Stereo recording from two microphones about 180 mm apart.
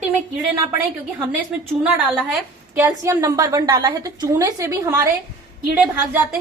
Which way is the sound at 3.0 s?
20° right (ahead or behind).